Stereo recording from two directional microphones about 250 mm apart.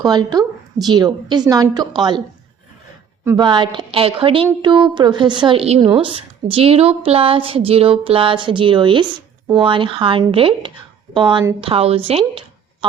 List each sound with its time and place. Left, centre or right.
0.0 s a woman's voice: centre
3.2 s a woman's voice: centre